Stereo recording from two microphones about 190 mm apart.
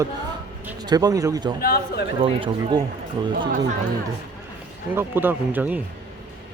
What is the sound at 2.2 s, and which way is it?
A man's voice, 25° right (ahead or behind).